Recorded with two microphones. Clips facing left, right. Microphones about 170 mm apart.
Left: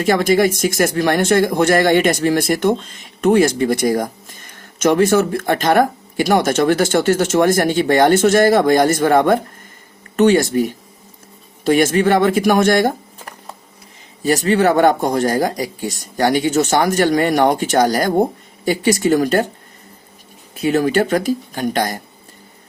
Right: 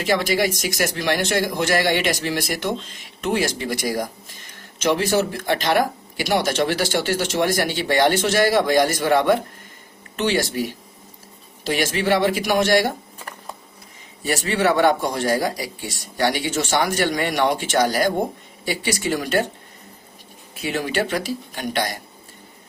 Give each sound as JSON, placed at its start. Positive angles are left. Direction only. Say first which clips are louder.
{"t": 0.0, "sound": "speech", "louder": "left 6 dB", "side_deg": 45}
{"t": 20.6, "sound": "speech", "louder": "left 8 dB", "side_deg": 40}